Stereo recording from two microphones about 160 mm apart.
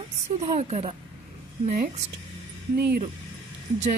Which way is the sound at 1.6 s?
55° right (ahead or behind).